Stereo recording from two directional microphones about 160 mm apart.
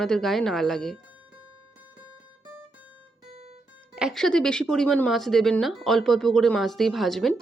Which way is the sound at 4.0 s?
Centre (ahead or behind).